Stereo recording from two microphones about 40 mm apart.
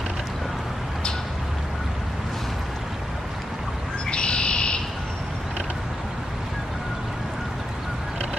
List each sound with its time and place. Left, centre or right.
4.1 s bird: left